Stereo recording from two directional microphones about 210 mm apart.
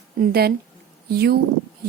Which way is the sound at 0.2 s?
50° right (ahead or behind).